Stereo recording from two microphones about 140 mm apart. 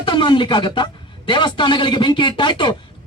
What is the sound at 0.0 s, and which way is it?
Speech, 35° left (ahead or behind).